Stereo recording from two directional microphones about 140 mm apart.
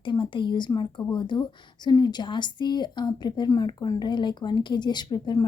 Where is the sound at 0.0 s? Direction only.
35° left (ahead or behind).